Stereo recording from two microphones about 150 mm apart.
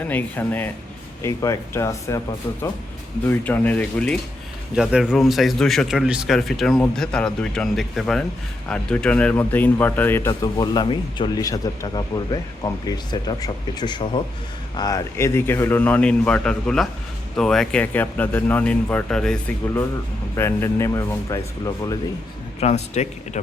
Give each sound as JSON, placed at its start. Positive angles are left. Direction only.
{"t": 0.0, "sound": "a man's voice", "side_deg": 10}
{"t": 4.7, "sound": "a man's voice", "side_deg": -5}
{"t": 20.3, "sound": "speech", "side_deg": 15}
{"t": 22.6, "sound": "speech", "side_deg": 50}